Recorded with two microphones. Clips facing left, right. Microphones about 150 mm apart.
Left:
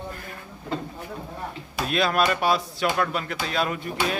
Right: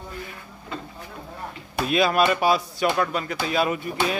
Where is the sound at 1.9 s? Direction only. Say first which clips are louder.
Right 3 dB; centre (ahead or behind).